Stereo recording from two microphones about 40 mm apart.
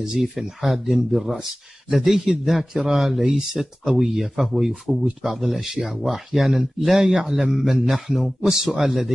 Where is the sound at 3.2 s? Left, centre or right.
Centre.